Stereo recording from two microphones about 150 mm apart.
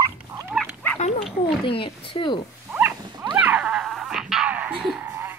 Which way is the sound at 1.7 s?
35° left (ahead or behind).